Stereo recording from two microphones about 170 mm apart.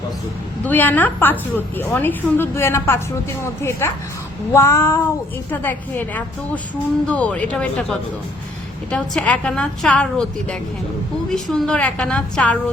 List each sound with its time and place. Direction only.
0.6 s a woman's voice: 10° left (ahead or behind)